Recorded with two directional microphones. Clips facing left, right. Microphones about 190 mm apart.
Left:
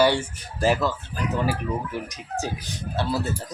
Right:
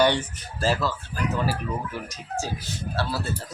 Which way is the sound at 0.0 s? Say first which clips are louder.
Left 1 dB; 10° left (ahead or behind).